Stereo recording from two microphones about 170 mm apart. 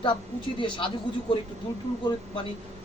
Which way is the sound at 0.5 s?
30° left (ahead or behind).